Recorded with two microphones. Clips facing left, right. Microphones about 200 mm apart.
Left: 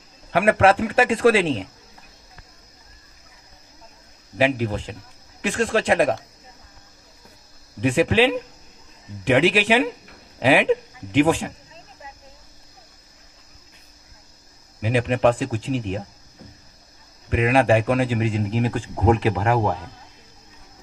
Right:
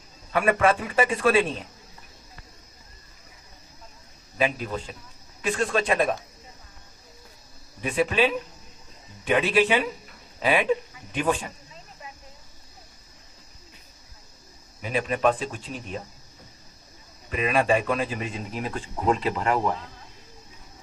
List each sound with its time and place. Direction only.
0.3 s a man's voice: 85° left
4.4 s a man's voice: 75° left (ahead or behind)
5.4 s a man's voice: 90° left
7.8 s a man's voice: 90° left
14.8 s a man's voice: 85° left
17.2 s a man's voice: 75° left (ahead or behind)